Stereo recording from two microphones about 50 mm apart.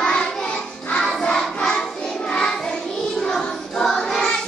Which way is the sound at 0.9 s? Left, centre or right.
Centre.